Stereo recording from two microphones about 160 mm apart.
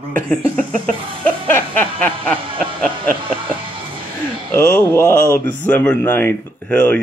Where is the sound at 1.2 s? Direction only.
10° left (ahead or behind).